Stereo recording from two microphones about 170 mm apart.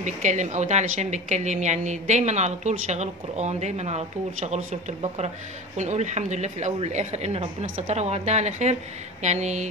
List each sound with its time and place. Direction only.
0.0 s a woman's voice: 45° right (ahead or behind)
5.8 s a woman's voice: 45° right (ahead or behind)